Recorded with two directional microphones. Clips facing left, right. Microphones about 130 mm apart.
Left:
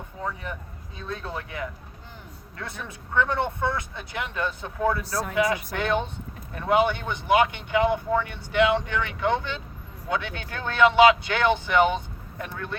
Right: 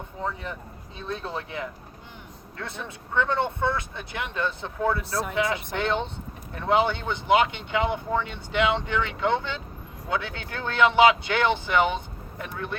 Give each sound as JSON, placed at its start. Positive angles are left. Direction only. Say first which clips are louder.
{"t": 0.9, "sound": "speech", "louder": "right 1 dB", "side_deg": -25}
{"t": 10.1, "sound": "speech", "louder": "even", "side_deg": 20}
{"t": 10.8, "sound": "speech", "louder": "left 2 dB", "side_deg": -20}